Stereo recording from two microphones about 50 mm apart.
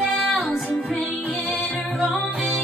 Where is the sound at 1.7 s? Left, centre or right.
Left.